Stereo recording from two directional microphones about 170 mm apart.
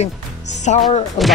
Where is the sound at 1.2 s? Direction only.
Centre (ahead or behind).